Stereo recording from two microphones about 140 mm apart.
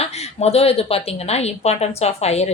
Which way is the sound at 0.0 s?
50° left (ahead or behind).